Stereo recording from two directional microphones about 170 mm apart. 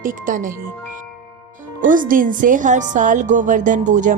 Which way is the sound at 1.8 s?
50° right (ahead or behind).